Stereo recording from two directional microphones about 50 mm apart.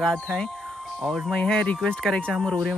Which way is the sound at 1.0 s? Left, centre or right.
Centre.